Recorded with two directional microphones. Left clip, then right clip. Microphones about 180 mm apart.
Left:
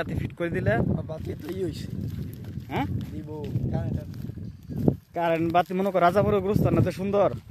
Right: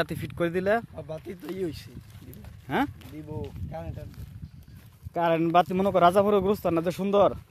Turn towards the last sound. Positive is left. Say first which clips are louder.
# right 1 dB
turn(degrees=-5)  # may be behind; listen again after turning